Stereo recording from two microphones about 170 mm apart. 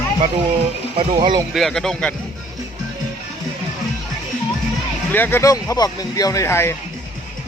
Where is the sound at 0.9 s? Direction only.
30° right (ahead or behind).